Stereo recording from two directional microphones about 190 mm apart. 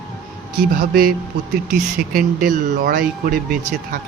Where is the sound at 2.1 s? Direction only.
45° right (ahead or behind).